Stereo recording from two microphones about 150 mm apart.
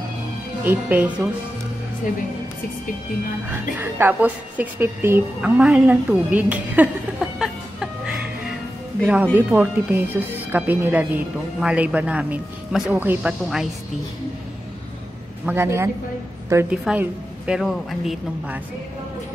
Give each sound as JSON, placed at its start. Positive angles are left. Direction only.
{"t": 0.7, "sound": "speech", "side_deg": -10}
{"t": 3.5, "sound": "speech", "side_deg": -15}
{"t": 7.3, "sound": "music", "side_deg": -5}
{"t": 9.0, "sound": "speech", "side_deg": -10}
{"t": 15.4, "sound": "a woman's voice", "side_deg": -15}
{"t": 16.8, "sound": "speech", "side_deg": -5}